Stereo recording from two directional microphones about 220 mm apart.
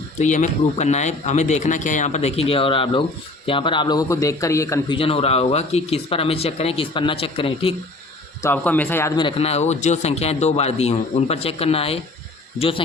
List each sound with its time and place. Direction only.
0.2 s a man's voice: 35° left (ahead or behind); by 4.9 s 15° left (ahead or behind)
4.9 s a man's voice: 25° left (ahead or behind)
8.4 s a man's voice: 10° left (ahead or behind); by 12.8 s 25° left (ahead or behind)